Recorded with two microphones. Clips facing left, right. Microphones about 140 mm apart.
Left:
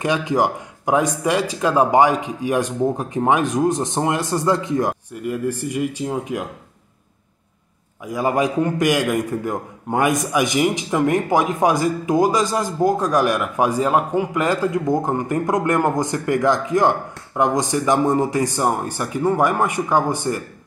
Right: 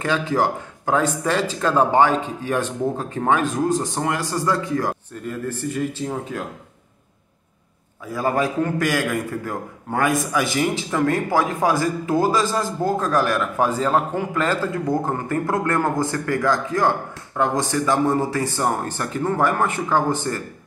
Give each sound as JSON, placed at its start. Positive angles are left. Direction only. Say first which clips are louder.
{"t": 0.0, "sound": "a man's voice", "louder": "left 2 dB", "side_deg": 15}
{"t": 8.0, "sound": "a man's voice", "louder": "left 2 dB", "side_deg": 15}